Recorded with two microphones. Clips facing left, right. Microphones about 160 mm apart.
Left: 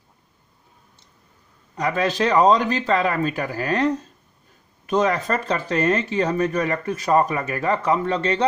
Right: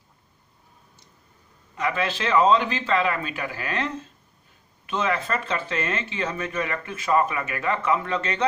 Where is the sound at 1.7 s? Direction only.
40° left (ahead or behind).